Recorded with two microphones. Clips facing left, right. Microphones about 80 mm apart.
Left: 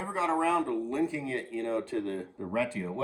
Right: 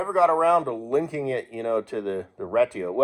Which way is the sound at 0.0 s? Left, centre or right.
Right.